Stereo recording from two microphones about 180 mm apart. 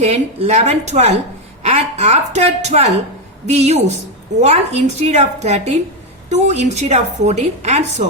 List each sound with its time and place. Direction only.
0.0 s a woman's voice: 35° right (ahead or behind)